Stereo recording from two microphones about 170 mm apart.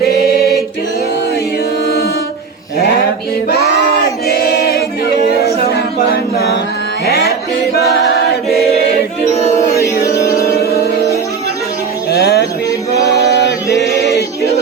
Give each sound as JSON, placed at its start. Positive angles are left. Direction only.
{"t": 0.0, "sound": "singing", "side_deg": 65}
{"t": 4.3, "sound": "choir", "side_deg": 70}
{"t": 5.3, "sound": "a sound", "side_deg": 65}
{"t": 6.3, "sound": "music", "side_deg": 70}
{"t": 8.5, "sound": "choir", "side_deg": 70}
{"t": 9.6, "sound": "music", "side_deg": 20}
{"t": 12.1, "sound": "music", "side_deg": 75}
{"t": 13.3, "sound": "chant", "side_deg": 90}